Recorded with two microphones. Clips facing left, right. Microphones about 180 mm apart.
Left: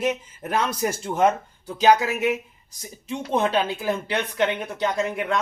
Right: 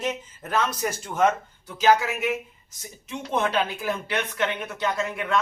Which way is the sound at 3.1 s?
35° left (ahead or behind).